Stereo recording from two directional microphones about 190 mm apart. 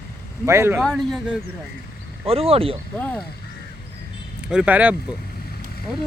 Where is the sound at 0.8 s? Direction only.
Centre (ahead or behind).